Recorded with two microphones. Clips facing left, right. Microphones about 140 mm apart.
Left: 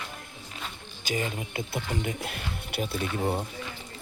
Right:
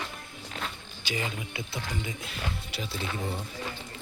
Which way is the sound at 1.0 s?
45° left (ahead or behind).